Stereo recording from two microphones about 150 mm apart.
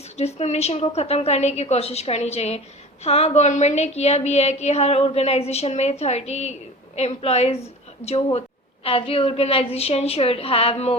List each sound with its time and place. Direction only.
0.2 s a woman's voice: 45° left (ahead or behind)